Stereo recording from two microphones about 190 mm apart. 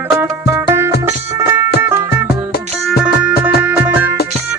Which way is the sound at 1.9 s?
10° right (ahead or behind).